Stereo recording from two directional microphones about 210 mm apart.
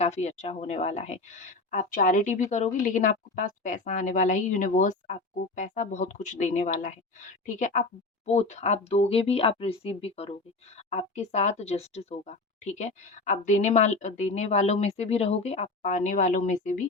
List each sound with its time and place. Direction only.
0.0 s speech: 30° left (ahead or behind)